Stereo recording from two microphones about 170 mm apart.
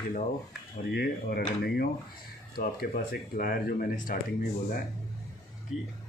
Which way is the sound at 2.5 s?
55° left (ahead or behind).